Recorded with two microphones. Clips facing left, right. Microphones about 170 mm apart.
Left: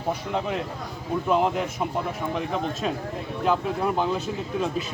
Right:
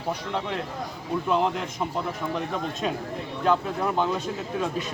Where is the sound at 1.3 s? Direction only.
5° left (ahead or behind).